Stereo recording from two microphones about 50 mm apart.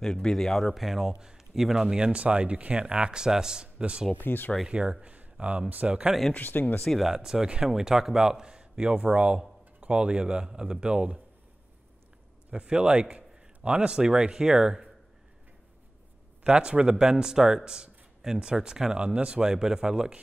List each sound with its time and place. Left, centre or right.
0.0 s speech: centre
4.1 s speech: left
4.6 s speech: centre
6.3 s speech: left
7.2 s speech: centre
12.4 s speech: right
16.4 s speech: right